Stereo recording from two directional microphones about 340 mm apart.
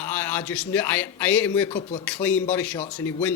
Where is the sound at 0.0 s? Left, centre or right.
Centre.